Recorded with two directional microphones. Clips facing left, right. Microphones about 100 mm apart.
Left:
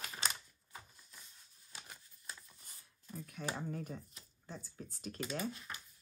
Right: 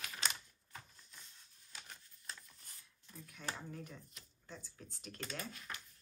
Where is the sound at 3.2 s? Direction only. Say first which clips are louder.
Left 7 dB; 45° left (ahead or behind).